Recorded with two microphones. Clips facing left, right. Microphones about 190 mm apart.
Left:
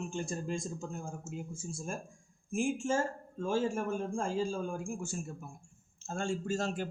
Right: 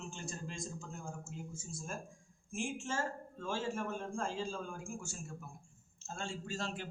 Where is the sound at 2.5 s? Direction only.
50° left (ahead or behind).